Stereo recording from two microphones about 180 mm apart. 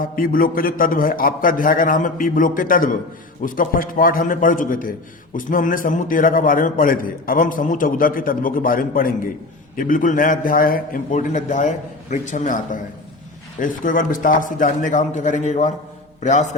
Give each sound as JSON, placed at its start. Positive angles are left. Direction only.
{"t": 0.0, "sound": "a man's voice", "side_deg": 50}